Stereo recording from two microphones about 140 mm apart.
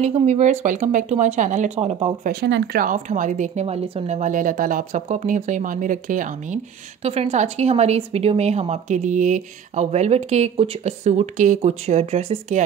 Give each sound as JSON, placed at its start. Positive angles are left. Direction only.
{"t": 0.0, "sound": "speech", "side_deg": -55}
{"t": 2.2, "sound": "speech", "side_deg": -85}
{"t": 3.6, "sound": "speech", "side_deg": -45}
{"t": 5.0, "sound": "speech", "side_deg": -60}